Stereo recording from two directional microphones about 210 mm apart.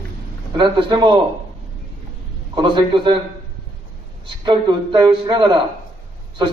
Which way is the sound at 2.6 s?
20° right (ahead or behind).